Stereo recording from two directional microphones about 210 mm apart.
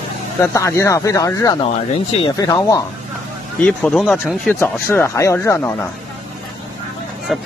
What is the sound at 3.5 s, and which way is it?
Speech, 5° left (ahead or behind).